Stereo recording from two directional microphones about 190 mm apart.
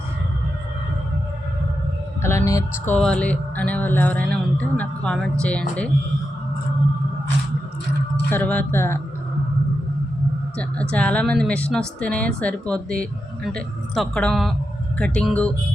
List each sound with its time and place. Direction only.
2.2 s music: 15° left (ahead or behind)
8.3 s music: 10° left (ahead or behind)
10.6 s speech: 5° left (ahead or behind)